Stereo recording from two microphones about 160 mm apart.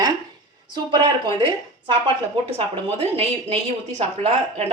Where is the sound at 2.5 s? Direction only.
40° right (ahead or behind).